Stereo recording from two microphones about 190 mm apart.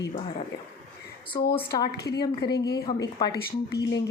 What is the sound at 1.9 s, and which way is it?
Speech, 60° left (ahead or behind).